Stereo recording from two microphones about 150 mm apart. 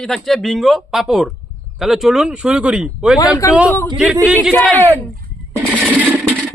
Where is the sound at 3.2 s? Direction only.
25° left (ahead or behind).